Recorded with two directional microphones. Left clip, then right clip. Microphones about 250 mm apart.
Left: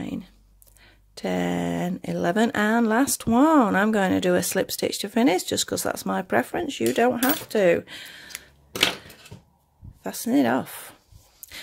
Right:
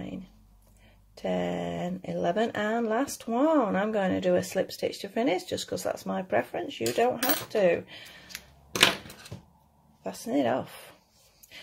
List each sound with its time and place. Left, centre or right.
1.1 s speech: left
8.3 s typewriter: left
10.0 s speech: left